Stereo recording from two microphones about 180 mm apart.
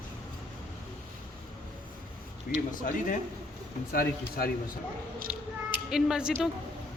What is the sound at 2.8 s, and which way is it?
Speech, 50° left (ahead or behind).